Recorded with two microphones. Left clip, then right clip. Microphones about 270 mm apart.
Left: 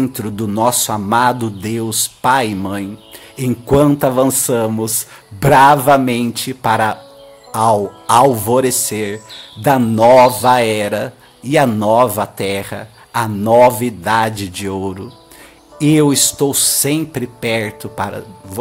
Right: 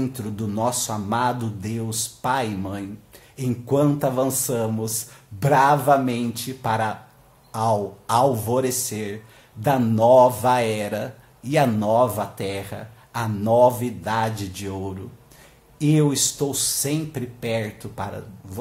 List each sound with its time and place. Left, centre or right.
0.0 s speech: left